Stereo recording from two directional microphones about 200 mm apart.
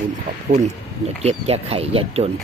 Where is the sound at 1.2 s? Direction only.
30° right (ahead or behind).